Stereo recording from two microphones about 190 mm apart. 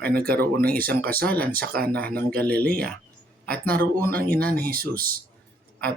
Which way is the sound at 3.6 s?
50° right (ahead or behind).